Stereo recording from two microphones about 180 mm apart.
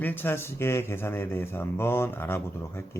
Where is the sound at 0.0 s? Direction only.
10° left (ahead or behind).